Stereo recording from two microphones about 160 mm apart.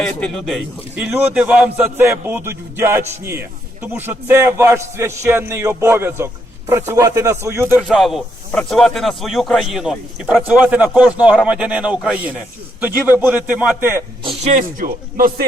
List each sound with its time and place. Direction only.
0.0 s a man's voice: 5° left (ahead or behind)
1.0 s a man's voice: 10° right (ahead or behind)
7.8 s a man's voice: centre (ahead or behind)
14.4 s speech: 50° right (ahead or behind)